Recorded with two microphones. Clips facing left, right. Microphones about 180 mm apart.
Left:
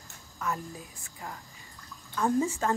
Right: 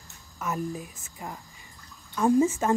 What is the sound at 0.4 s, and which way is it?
Speech, 20° right (ahead or behind).